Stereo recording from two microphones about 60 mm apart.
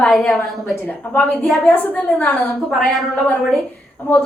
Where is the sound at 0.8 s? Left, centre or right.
Left.